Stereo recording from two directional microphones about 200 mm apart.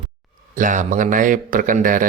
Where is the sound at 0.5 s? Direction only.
40° right (ahead or behind).